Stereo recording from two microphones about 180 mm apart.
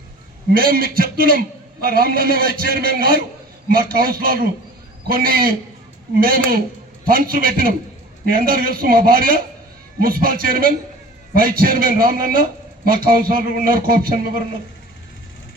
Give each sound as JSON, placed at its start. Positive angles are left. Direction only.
{"t": 0.5, "sound": "a man's voice", "side_deg": -55}